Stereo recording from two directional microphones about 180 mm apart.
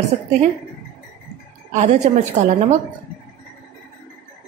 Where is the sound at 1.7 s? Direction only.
40° right (ahead or behind).